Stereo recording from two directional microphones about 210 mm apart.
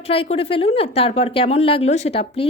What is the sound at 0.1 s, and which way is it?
A woman's voice, 25° left (ahead or behind).